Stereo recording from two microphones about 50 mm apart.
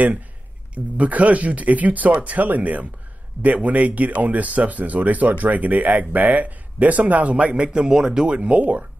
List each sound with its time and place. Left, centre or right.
0.9 s speech: right